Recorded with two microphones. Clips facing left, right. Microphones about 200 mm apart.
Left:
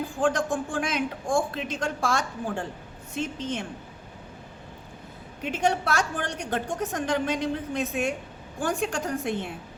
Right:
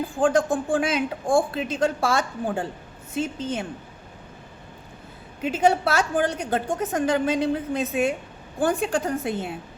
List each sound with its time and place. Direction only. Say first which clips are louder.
0.2 s a woman's voice: right 5 dB; centre (ahead or behind)
1.2 s a woman's voice: right 5 dB; 35° right (ahead or behind)
1.5 s a woman's voice: right 6 dB; 5° right (ahead or behind)
5.4 s a woman's voice: right 5 dB; 5° right (ahead or behind)